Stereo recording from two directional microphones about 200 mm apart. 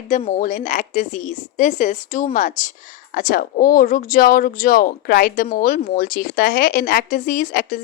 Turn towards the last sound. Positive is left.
turn(degrees=45)  # may be behind; listen again after turning